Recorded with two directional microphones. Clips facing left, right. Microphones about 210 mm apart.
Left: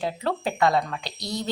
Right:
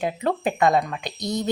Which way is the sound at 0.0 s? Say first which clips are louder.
Right 3 dB; 15° right (ahead or behind).